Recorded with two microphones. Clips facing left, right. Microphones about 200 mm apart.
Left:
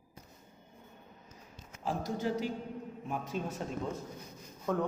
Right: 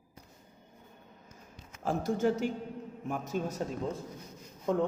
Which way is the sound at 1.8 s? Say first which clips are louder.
Right 5 dB; 50° right (ahead or behind).